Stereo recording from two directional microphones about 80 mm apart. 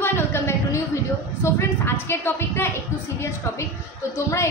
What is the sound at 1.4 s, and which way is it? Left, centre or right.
A woman's voice, left.